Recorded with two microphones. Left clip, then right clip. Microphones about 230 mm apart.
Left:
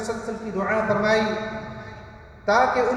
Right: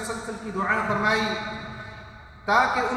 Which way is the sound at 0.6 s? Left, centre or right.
Centre.